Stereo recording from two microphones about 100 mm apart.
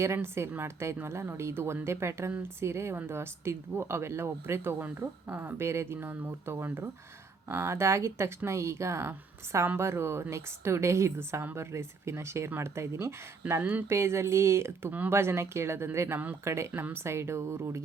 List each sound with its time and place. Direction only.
0.0 s speech: 25° right (ahead or behind)